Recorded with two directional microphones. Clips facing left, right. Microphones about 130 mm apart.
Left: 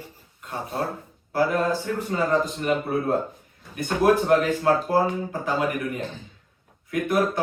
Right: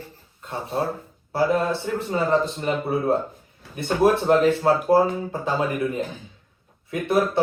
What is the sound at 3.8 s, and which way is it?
Speech, 30° right (ahead or behind).